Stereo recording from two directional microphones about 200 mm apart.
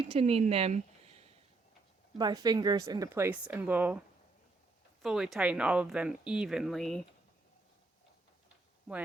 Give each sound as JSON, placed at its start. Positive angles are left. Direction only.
{"t": 0.1, "sound": "speech", "side_deg": -30}
{"t": 2.1, "sound": "speech", "side_deg": -20}
{"t": 5.0, "sound": "speech", "side_deg": -5}
{"t": 8.9, "sound": "speech", "side_deg": 0}